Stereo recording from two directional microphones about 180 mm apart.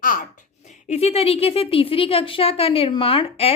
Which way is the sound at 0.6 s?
35° left (ahead or behind).